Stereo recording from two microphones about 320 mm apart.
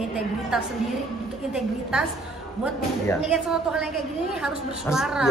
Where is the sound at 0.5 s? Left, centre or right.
Centre.